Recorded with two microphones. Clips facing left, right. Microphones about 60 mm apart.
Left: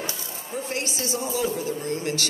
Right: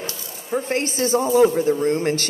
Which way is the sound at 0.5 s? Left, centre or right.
Right.